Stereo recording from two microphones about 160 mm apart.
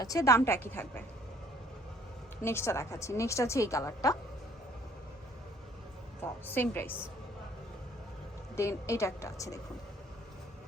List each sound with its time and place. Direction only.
0.0 s a woman's voice: 20° left (ahead or behind)
2.4 s a woman's voice: 15° left (ahead or behind)
6.4 s a woman's voice: 10° left (ahead or behind)
8.5 s a woman's voice: 15° left (ahead or behind)